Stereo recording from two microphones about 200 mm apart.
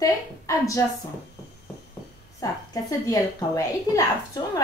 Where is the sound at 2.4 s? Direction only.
15° left (ahead or behind).